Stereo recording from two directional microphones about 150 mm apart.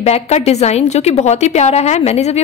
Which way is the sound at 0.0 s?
45° left (ahead or behind).